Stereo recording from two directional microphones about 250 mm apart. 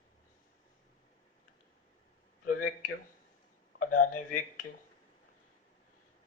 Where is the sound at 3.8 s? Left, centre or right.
Left.